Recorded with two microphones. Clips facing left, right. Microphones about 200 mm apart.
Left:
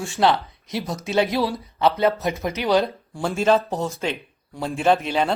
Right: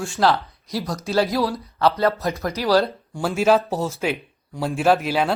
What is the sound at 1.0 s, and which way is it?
A man's voice, 20° left (ahead or behind).